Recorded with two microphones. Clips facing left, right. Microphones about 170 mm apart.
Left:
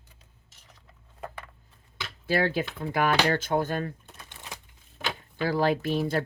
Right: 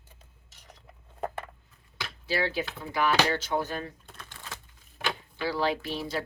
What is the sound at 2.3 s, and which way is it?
Speech, 50° left (ahead or behind).